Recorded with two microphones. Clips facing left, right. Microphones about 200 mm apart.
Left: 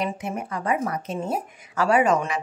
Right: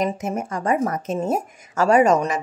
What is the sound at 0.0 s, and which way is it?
Speech, 45° right (ahead or behind).